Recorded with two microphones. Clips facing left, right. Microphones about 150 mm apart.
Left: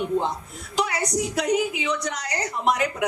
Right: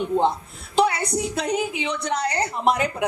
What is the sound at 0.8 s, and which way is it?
A woman's voice, 30° right (ahead or behind).